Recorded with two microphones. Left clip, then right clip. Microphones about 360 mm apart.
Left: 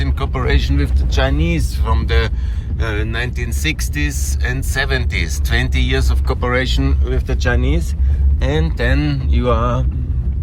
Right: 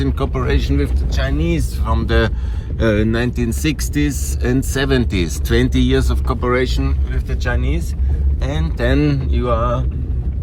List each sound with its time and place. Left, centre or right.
0.0 s speech: centre
9.6 s speech: left